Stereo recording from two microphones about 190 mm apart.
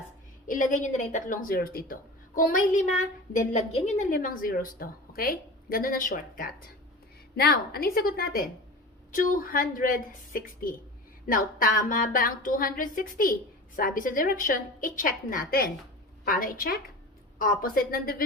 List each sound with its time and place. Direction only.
0.4 s a woman's voice: 45° left (ahead or behind)